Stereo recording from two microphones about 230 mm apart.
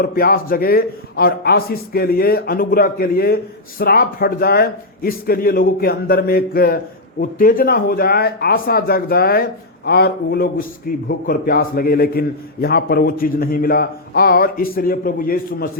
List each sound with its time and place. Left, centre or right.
0.0 s a man's voice: left